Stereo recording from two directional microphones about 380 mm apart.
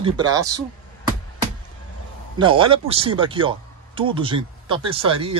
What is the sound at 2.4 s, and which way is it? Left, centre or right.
Speech, centre.